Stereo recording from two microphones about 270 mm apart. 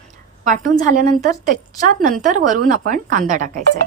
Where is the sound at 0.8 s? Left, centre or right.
Right.